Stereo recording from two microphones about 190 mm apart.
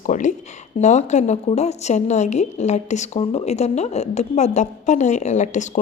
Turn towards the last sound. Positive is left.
turn(degrees=40)  # may be behind; listen again after turning